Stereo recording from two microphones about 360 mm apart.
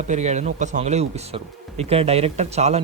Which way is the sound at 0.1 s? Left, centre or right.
Centre.